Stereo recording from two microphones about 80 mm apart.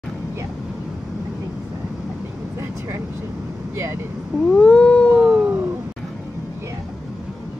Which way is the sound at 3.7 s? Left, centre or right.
Right.